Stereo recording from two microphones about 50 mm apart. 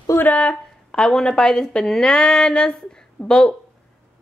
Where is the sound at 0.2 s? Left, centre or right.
Left.